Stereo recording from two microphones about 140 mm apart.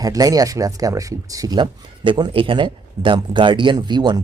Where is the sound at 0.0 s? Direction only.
25° right (ahead or behind).